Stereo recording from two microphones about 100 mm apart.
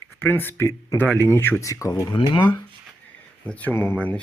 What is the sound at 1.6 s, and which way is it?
Speech, 35° left (ahead or behind).